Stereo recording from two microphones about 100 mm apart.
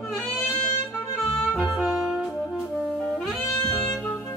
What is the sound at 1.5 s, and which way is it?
Music, 5° right (ahead or behind).